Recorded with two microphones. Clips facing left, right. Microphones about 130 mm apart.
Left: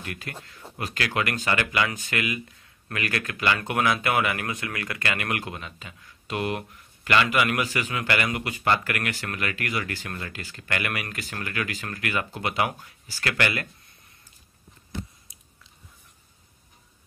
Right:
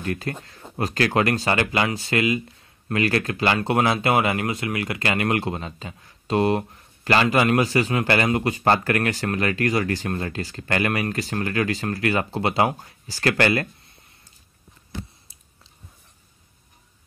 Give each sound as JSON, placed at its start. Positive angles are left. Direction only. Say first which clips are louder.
{"t": 0.0, "sound": "speech", "louder": "right 9 dB", "side_deg": -35}